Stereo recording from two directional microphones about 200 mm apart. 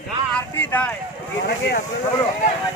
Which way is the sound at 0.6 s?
10° left (ahead or behind).